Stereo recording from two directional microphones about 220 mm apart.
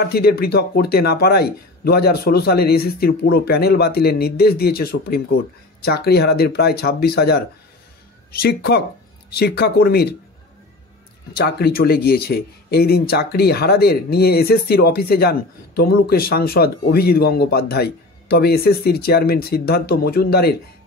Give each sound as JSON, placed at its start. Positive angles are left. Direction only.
{"t": 0.1, "sound": "speech", "side_deg": 45}
{"t": 11.3, "sound": "speech", "side_deg": 45}